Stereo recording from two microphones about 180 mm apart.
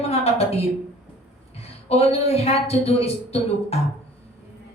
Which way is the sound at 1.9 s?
35° left (ahead or behind).